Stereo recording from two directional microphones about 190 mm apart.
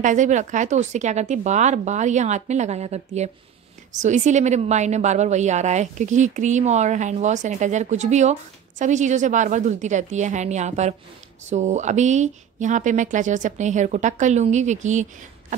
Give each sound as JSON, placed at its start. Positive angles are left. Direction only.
{"t": 0.0, "sound": "a woman's voice", "side_deg": -40}